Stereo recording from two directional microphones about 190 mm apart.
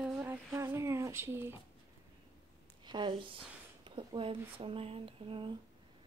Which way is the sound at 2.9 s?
25° right (ahead or behind).